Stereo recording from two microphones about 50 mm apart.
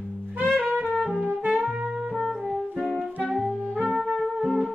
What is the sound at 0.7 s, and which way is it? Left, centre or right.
Music, right.